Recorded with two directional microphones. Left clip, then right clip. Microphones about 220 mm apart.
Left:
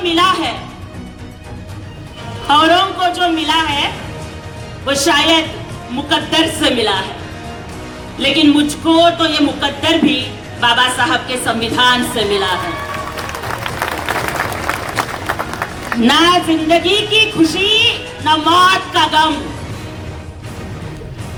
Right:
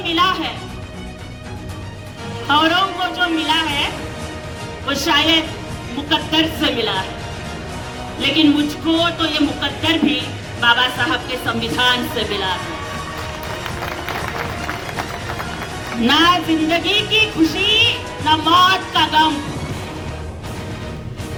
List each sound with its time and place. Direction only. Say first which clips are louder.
0.0 s music: left 4 dB; 25° right (ahead or behind)
2.5 s music: left 5 dB; 25° right (ahead or behind)
4.9 s music: left 4 dB; 25° right (ahead or behind)
8.2 s music: left 4 dB; 25° right (ahead or behind)
16.0 s music: left 3 dB; 25° right (ahead or behind)